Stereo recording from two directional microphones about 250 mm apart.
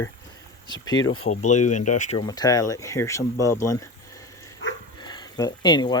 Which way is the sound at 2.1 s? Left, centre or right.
Centre.